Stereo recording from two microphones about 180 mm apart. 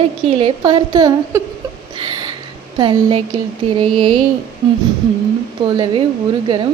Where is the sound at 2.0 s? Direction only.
25° right (ahead or behind).